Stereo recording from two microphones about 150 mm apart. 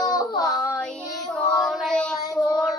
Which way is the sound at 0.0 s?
25° left (ahead or behind).